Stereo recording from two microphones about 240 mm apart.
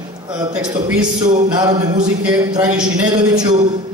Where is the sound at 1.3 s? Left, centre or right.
Centre.